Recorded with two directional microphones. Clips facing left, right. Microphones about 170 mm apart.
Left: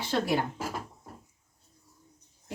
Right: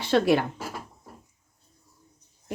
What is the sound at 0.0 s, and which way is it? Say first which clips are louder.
Speech: right 7 dB; 75° right (ahead or behind).